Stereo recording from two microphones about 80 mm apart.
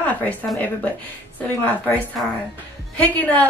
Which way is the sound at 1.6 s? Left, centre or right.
Left.